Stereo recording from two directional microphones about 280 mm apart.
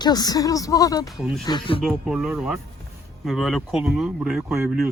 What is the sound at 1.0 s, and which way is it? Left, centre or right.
Speech, centre.